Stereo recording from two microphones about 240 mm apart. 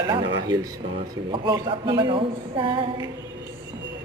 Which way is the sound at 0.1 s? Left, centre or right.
Centre.